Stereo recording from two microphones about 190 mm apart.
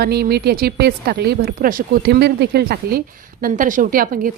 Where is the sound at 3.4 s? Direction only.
45° right (ahead or behind).